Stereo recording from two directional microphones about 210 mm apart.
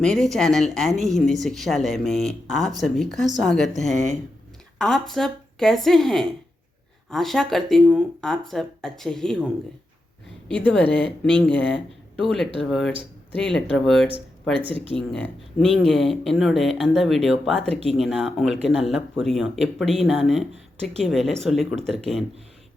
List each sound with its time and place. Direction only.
0.0 s a woman's voice: centre (ahead or behind)
10.5 s a woman's voice: 5° left (ahead or behind)
14.6 s speech: 25° right (ahead or behind)
15.0 s a woman's voice: 5° left (ahead or behind)